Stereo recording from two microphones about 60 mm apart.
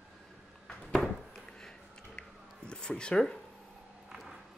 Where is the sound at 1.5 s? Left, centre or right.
Centre.